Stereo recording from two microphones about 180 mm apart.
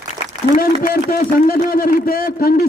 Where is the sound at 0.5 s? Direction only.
50° left (ahead or behind).